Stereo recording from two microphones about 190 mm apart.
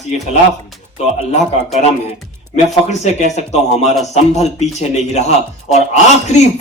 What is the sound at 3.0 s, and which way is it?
A man's voice, 35° left (ahead or behind).